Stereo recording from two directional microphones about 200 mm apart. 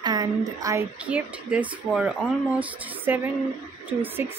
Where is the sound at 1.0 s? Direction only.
5° right (ahead or behind).